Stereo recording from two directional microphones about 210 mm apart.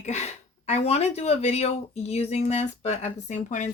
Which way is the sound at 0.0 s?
35° left (ahead or behind).